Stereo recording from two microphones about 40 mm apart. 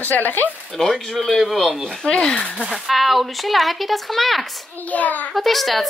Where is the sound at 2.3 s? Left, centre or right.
Left.